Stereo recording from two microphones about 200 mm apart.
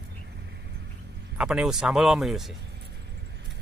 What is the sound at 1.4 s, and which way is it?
Speech, 5° right (ahead or behind).